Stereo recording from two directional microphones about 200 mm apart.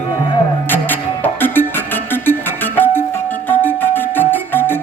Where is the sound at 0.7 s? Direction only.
10° left (ahead or behind).